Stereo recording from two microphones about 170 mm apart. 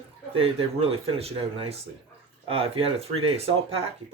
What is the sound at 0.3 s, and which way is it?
Speech, 35° right (ahead or behind).